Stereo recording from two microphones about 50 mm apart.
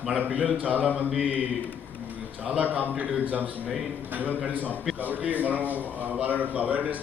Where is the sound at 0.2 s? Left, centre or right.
Right.